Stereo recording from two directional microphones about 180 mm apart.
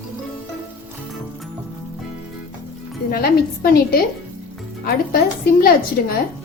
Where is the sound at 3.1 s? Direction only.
55° left (ahead or behind).